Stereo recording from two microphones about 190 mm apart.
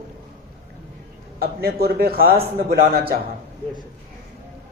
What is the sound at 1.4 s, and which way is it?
A man's voice, 55° right (ahead or behind).